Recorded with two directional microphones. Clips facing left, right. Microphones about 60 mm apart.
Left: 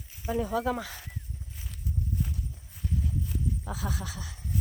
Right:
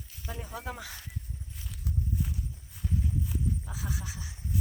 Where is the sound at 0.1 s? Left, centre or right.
Centre.